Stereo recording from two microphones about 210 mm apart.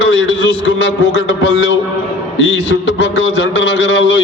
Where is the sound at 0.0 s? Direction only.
60° left (ahead or behind).